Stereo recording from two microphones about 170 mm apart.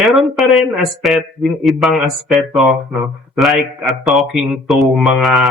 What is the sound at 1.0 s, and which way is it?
Speech, centre (ahead or behind).